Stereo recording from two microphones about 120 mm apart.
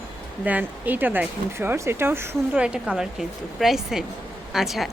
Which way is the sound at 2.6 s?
5° right (ahead or behind).